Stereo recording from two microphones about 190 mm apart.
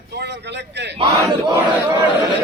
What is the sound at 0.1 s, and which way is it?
Speech, 60° right (ahead or behind).